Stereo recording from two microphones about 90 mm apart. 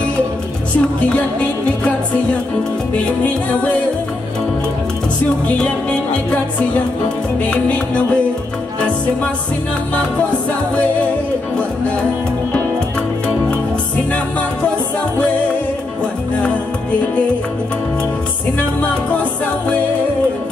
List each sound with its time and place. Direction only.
0.7 s music: 15° left (ahead or behind)
5.6 s music: 15° left (ahead or behind)
7.4 s music: 15° left (ahead or behind)